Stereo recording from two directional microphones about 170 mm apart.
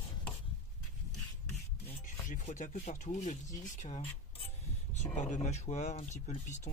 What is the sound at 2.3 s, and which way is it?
Speech, 45° left (ahead or behind).